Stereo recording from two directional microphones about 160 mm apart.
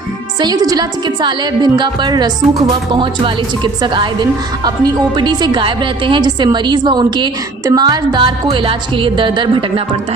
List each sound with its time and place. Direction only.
0.4 s a woman's voice: 25° right (ahead or behind)